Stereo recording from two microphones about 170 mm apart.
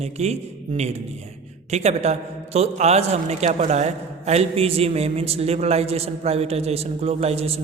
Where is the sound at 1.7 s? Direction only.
40° right (ahead or behind).